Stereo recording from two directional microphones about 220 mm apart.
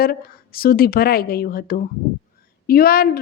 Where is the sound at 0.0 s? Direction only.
45° left (ahead or behind).